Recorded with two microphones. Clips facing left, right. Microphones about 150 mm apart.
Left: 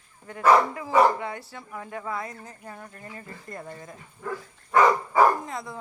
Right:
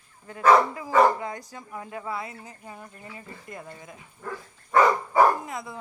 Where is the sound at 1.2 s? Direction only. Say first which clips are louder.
Even; 35° right (ahead or behind).